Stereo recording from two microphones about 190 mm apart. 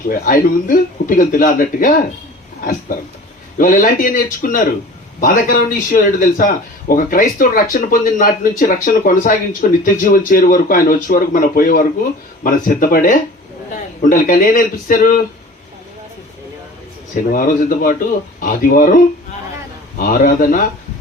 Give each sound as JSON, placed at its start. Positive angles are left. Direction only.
{"t": 0.1, "sound": "speech", "side_deg": 45}
{"t": 3.6, "sound": "speech", "side_deg": 45}
{"t": 17.3, "sound": "speech", "side_deg": 50}
{"t": 20.0, "sound": "speech", "side_deg": 50}